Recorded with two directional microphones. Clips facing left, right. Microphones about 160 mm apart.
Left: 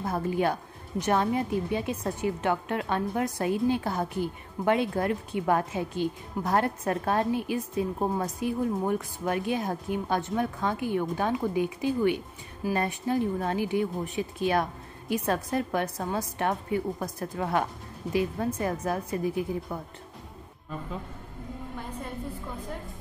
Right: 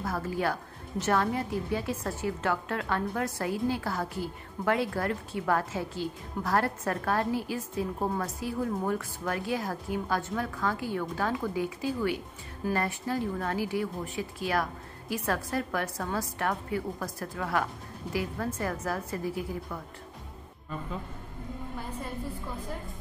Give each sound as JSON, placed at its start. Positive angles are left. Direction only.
{"t": 0.0, "sound": "a woman's voice", "side_deg": 20}